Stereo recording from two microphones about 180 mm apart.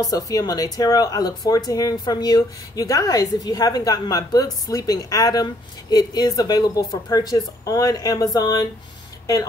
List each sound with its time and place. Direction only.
0.1 s a woman's voice: 20° left (ahead or behind)